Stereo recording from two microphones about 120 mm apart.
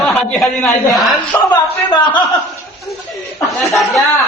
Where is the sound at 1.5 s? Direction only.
40° left (ahead or behind).